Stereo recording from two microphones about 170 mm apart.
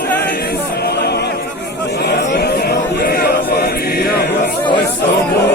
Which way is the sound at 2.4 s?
70° left (ahead or behind).